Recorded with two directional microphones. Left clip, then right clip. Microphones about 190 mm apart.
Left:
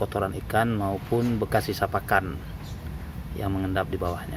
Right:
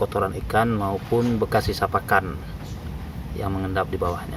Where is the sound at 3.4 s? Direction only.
15° left (ahead or behind).